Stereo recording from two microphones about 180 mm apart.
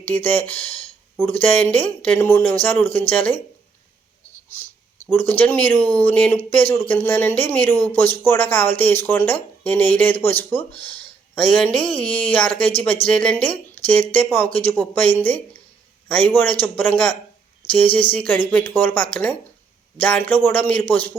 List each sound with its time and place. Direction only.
0.0 s speech: 10° left (ahead or behind)
0.7 s speech: 30° left (ahead or behind)
1.2 s speech: 10° left (ahead or behind)
5.1 s speech: 10° left (ahead or behind)